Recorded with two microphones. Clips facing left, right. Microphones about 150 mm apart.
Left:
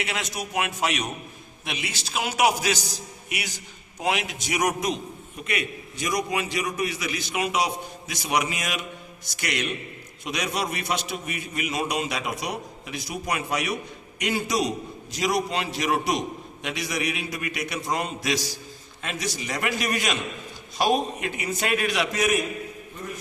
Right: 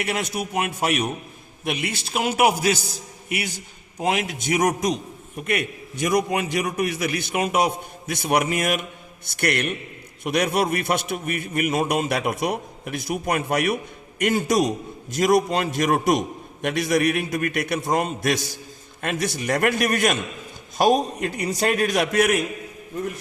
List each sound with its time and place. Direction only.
0.0 s a man's voice: 55° right (ahead or behind)